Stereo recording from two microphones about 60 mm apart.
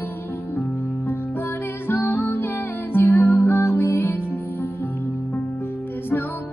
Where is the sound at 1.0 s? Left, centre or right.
Left.